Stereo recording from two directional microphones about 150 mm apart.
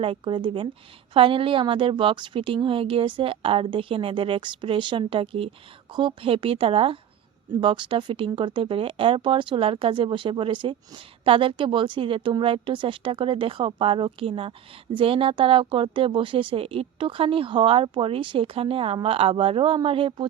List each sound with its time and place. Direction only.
0.0 s speech: 35° right (ahead or behind)